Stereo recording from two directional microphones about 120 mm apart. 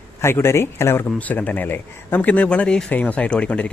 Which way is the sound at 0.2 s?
20° left (ahead or behind).